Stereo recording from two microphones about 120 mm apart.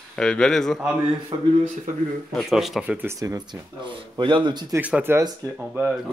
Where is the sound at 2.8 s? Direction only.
15° right (ahead or behind).